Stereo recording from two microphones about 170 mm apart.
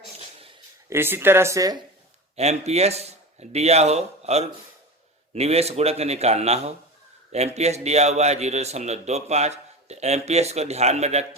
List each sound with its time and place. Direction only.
0.9 s speech: 15° right (ahead or behind)
2.3 s a man's voice: 40° right (ahead or behind)